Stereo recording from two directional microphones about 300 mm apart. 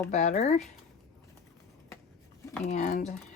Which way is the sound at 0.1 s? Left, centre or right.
Left.